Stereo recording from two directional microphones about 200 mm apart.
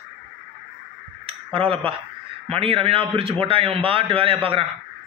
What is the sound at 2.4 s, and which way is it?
A man's voice, 30° right (ahead or behind).